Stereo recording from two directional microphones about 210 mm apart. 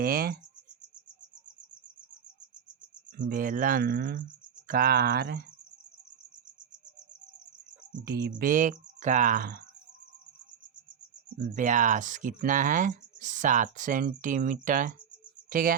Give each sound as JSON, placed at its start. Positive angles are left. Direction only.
{"t": 0.0, "sound": "speech", "side_deg": -45}
{"t": 3.2, "sound": "speech", "side_deg": -40}
{"t": 8.4, "sound": "speech", "side_deg": -40}
{"t": 11.4, "sound": "speech", "side_deg": -40}